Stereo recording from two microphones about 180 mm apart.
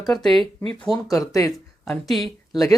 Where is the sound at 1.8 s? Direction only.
Centre (ahead or behind).